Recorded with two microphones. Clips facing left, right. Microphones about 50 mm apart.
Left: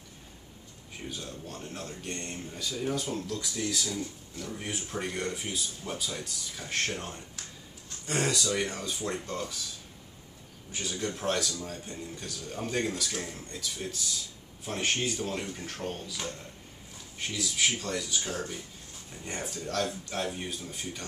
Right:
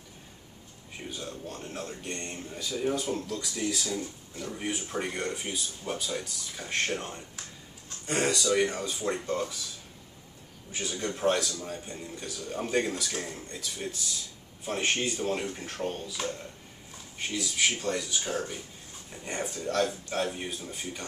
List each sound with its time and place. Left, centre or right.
1.0 s speech: centre
10.7 s speech: centre
11.5 s speech: centre
15.0 s speech: centre